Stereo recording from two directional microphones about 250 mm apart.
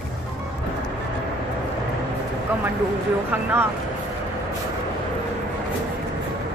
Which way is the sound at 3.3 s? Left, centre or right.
Centre.